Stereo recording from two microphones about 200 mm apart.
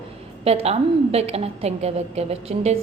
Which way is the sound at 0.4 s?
30° right (ahead or behind).